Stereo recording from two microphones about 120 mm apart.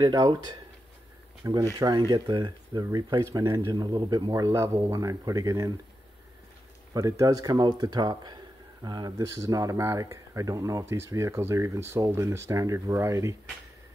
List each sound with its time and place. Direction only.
0.0 s speech: 35° right (ahead or behind)
6.9 s speech: 25° right (ahead or behind)